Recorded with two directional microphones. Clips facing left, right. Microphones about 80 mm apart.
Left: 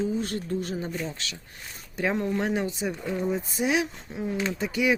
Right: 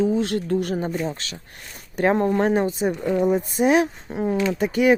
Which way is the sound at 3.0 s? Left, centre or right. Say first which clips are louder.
Right 8 dB; right.